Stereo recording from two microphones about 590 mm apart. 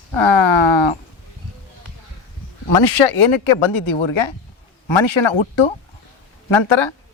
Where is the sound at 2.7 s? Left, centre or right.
Left.